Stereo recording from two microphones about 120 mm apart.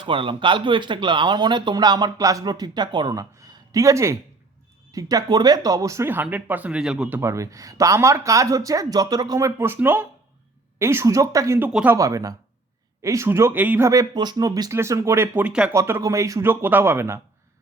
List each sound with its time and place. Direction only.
0.0 s speech: 45° right (ahead or behind); by 7.2 s 5° right (ahead or behind)
7.2 s speech: 25° right (ahead or behind)
15.7 s speech: 25° right (ahead or behind)